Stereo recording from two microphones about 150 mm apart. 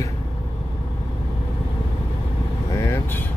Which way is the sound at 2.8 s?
15° left (ahead or behind).